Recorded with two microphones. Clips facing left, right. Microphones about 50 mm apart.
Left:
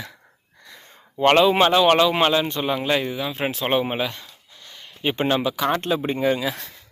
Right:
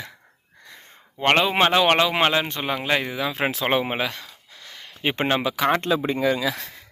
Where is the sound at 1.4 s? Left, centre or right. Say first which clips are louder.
Left 3 dB; right.